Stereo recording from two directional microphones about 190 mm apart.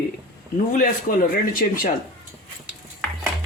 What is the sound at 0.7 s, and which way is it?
Speech, 45° left (ahead or behind).